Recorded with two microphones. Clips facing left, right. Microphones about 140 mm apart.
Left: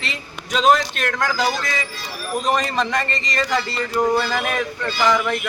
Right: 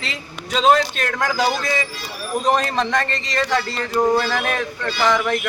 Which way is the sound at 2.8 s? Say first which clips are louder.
Right 1 dB; centre (ahead or behind).